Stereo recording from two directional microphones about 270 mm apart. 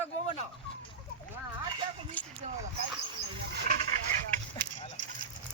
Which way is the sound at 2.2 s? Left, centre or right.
Centre.